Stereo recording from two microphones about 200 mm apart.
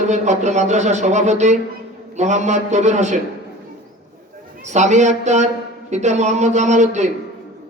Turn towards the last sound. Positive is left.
turn(degrees=-35)  # may be behind; listen again after turning